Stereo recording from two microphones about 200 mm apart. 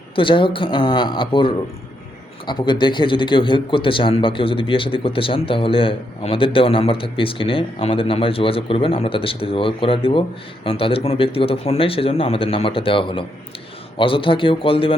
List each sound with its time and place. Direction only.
0.2 s speech: 25° left (ahead or behind)